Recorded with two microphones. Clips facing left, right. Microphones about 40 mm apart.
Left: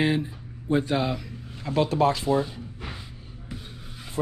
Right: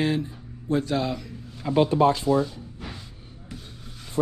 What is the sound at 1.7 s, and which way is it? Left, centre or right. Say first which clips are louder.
Speech: right 3 dB; centre.